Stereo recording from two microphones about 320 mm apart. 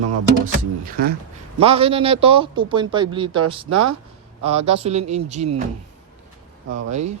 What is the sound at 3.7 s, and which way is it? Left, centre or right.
Speech, right.